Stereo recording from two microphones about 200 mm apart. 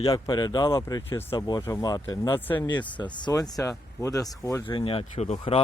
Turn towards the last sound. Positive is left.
turn(degrees=30)  # may be behind; listen again after turning